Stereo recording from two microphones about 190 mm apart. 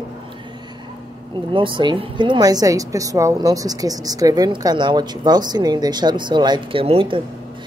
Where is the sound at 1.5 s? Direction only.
25° right (ahead or behind).